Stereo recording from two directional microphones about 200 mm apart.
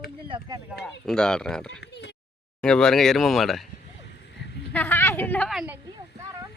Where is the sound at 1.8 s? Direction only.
60° left (ahead or behind).